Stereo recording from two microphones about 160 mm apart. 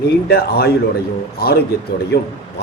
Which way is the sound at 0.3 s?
80° left.